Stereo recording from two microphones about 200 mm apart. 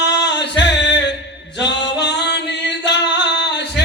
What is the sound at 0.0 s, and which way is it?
Music, 60° left (ahead or behind).